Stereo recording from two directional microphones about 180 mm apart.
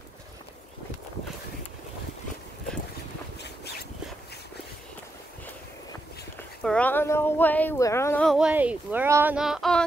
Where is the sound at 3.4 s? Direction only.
65° left (ahead or behind).